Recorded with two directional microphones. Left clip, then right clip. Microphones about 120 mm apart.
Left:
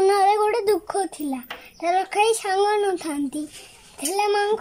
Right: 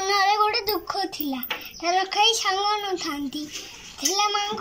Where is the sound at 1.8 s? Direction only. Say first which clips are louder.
Left 1 dB; 35° left (ahead or behind).